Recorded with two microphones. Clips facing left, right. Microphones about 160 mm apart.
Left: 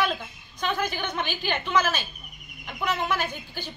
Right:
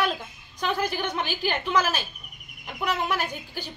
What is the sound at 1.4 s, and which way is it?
A woman's voice, 10° right (ahead or behind).